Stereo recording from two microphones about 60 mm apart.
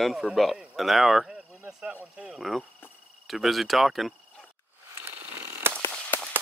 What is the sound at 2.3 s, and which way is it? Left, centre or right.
Speech, centre.